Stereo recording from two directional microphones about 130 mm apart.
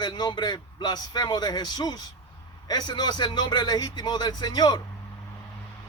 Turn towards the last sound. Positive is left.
turn(degrees=30)  # may be behind; listen again after turning